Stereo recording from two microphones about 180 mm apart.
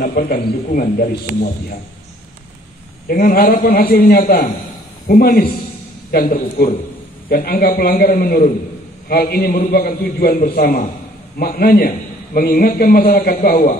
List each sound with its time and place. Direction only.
0.0 s a man's voice: 55° left (ahead or behind)
3.1 s a man's voice: 55° left (ahead or behind)